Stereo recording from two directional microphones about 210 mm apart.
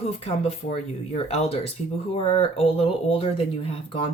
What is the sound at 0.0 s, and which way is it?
Speech, 30° left (ahead or behind).